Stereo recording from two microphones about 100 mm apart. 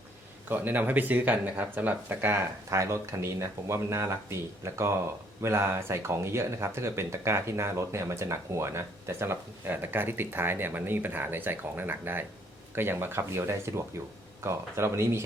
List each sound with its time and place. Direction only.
0.4 s speech: 20° right (ahead or behind)